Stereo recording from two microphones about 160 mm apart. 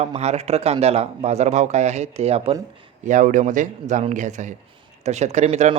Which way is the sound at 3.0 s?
50° right (ahead or behind).